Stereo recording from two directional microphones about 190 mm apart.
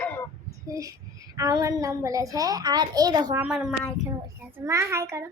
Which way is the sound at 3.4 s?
5° right (ahead or behind).